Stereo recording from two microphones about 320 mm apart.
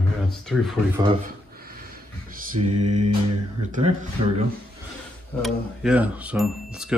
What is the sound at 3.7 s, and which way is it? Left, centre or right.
Speech, right.